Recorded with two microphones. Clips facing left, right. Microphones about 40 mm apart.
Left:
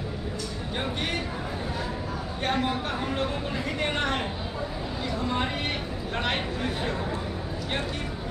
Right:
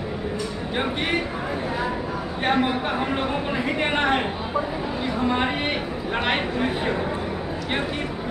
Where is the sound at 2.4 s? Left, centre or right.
Right.